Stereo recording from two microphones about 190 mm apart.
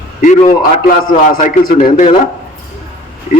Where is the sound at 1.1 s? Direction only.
45° left (ahead or behind).